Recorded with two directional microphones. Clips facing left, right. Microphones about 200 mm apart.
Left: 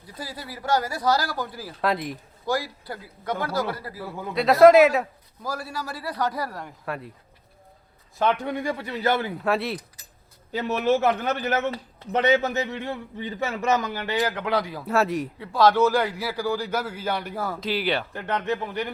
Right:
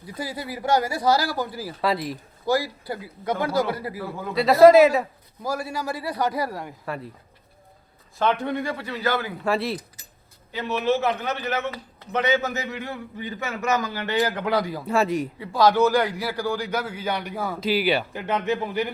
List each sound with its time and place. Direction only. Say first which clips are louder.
0.1 s speech: right 5 dB; 15° right (ahead or behind)
4.4 s a man's voice: right 1 dB; centre (ahead or behind)
5.4 s speech: right 4 dB; 10° right (ahead or behind)
8.2 s a man's voice: right 1 dB; 10° left (ahead or behind)
9.4 s a man's voice: right 1 dB; centre (ahead or behind)
10.7 s a man's voice: left 1 dB; 45° left (ahead or behind)
11.7 s a man's voice: left 2 dB; 35° left (ahead or behind)
14.0 s a man's voice: right 2 dB; 10° left (ahead or behind)